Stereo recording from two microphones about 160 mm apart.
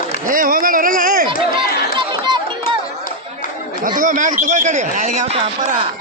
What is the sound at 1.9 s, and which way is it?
Chatter, 30° right (ahead or behind).